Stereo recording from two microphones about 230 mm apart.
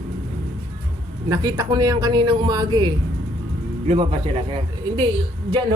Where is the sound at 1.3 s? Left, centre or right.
Centre.